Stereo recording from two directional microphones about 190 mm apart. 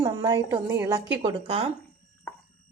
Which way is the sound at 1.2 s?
30° right (ahead or behind).